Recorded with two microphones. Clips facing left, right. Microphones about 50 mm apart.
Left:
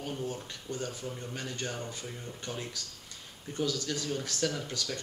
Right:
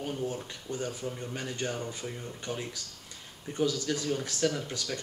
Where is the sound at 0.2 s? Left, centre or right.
Right.